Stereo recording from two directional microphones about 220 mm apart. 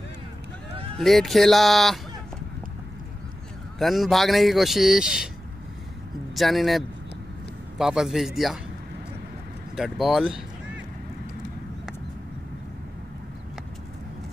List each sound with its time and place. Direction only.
0.9 s a man's voice: centre (ahead or behind)
3.8 s a man's voice: centre (ahead or behind)
6.3 s a man's voice: centre (ahead or behind)
9.8 s a man's voice: centre (ahead or behind)